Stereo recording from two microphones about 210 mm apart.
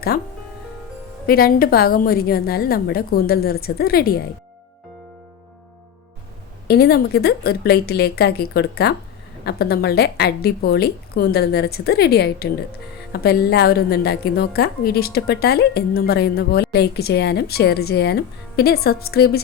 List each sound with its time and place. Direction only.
1.3 s a woman's voice: 45° left (ahead or behind)
6.7 s a woman's voice: 50° left (ahead or behind)